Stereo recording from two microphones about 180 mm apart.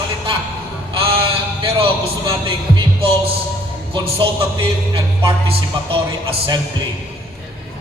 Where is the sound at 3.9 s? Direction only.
30° right (ahead or behind).